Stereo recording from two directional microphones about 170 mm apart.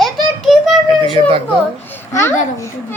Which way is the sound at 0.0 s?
Centre (ahead or behind).